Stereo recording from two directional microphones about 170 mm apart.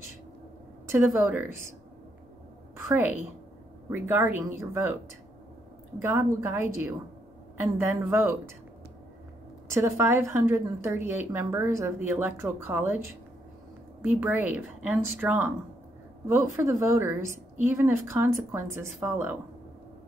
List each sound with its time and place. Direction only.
0.8 s a woman's voice: 15° right (ahead or behind)
2.9 s a woman's voice: 10° right (ahead or behind)
5.9 s a woman's voice: 15° right (ahead or behind)
9.8 s a woman's voice: 15° right (ahead or behind)